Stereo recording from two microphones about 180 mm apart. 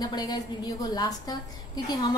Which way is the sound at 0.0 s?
25° left (ahead or behind).